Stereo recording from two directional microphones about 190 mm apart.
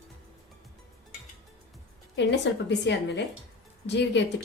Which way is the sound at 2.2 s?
65° left (ahead or behind).